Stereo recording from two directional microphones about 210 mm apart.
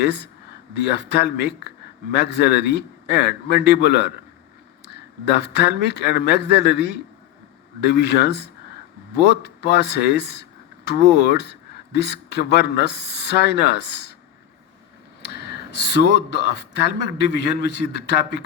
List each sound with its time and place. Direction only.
0.0 s a man's voice: 55° left (ahead or behind)
5.3 s a man's voice: 55° left (ahead or behind)
15.7 s a man's voice: 50° left (ahead or behind)